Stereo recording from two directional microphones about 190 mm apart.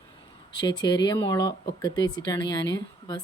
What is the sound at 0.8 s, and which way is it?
Speech, 20° left (ahead or behind).